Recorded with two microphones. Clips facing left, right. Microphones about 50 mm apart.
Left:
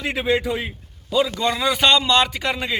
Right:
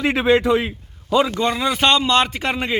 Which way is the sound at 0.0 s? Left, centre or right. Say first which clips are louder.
Right 5 dB; right.